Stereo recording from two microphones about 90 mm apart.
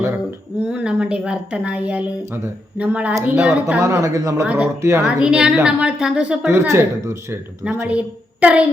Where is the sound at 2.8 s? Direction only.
15° right (ahead or behind).